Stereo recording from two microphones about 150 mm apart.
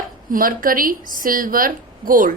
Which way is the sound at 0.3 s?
70° right (ahead or behind).